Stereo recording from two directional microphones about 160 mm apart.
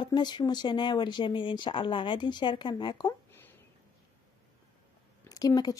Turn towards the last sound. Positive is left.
turn(degrees=25)  # may be behind; listen again after turning